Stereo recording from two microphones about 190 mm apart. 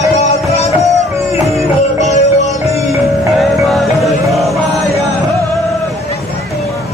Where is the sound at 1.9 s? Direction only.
40° left (ahead or behind).